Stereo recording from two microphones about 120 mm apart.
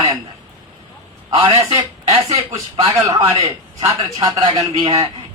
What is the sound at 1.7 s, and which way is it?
Speech, 50° right (ahead or behind).